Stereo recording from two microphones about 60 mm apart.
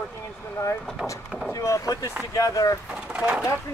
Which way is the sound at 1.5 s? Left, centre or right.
Left.